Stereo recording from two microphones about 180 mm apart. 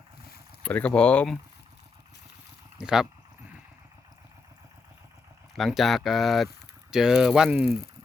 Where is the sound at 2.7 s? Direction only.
5° right (ahead or behind).